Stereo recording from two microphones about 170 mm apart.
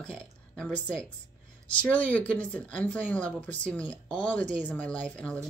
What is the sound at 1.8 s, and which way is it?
Speech, 10° left (ahead or behind).